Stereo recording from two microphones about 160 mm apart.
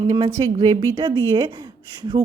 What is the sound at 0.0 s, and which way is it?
Speech, 25° right (ahead or behind).